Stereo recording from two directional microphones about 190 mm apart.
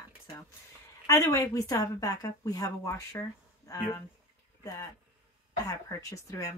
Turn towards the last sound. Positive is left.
turn(degrees=15)  # may be behind; listen again after turning